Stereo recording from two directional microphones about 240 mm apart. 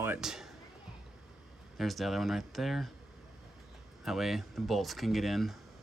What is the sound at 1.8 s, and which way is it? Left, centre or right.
Speech, centre.